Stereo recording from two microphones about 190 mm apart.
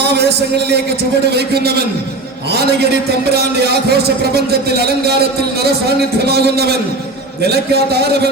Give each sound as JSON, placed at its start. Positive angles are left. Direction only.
{"t": 0.0, "sound": "a man's voice", "side_deg": -60}
{"t": 3.3, "sound": "a man's voice", "side_deg": -60}